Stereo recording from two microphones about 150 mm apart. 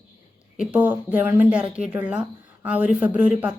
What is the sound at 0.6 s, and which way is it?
A woman's voice, 10° right (ahead or behind).